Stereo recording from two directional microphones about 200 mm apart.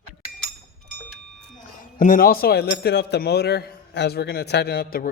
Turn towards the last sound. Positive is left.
turn(degrees=50)  # may be behind; listen again after turning